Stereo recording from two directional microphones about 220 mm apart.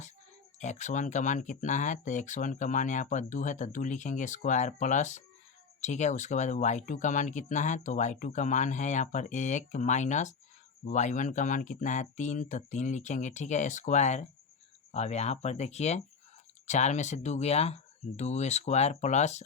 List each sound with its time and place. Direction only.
0.6 s speech: 35° left (ahead or behind)